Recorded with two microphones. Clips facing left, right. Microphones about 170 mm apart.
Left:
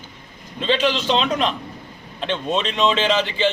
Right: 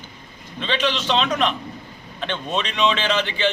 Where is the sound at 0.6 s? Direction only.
40° left (ahead or behind).